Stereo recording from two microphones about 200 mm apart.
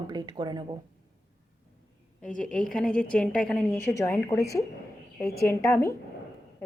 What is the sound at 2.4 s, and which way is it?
A woman's voice, 5° left (ahead or behind).